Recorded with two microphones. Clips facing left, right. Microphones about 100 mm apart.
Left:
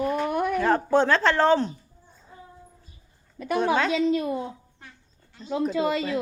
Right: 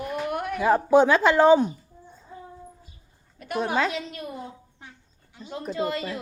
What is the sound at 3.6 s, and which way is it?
Speech, centre (ahead or behind).